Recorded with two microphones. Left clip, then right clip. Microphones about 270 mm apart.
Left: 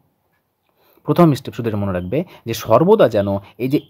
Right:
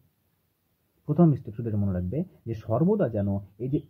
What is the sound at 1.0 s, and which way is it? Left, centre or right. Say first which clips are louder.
Speech: left 11 dB; left.